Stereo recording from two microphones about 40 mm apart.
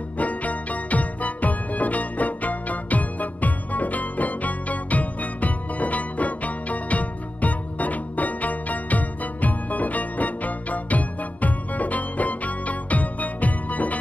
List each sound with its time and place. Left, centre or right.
0.2 s music: left